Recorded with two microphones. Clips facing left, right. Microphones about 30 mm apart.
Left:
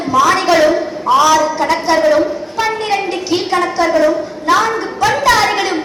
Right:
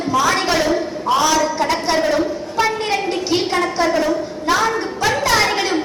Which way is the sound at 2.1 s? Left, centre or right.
Centre.